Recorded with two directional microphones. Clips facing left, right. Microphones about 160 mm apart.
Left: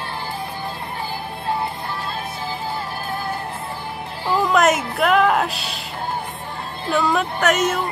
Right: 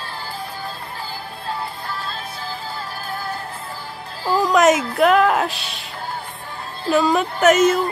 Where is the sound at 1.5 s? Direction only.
20° left (ahead or behind).